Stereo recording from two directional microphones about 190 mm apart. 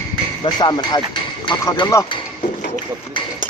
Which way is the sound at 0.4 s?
20° left (ahead or behind).